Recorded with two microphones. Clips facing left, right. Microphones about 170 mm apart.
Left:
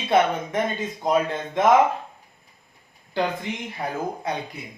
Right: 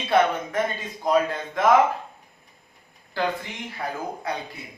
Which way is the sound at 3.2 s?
20° left (ahead or behind).